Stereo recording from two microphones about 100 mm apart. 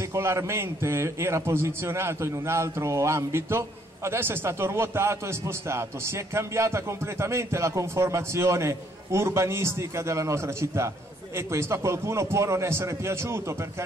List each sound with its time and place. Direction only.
0.0 s a man's voice: 30° right (ahead or behind)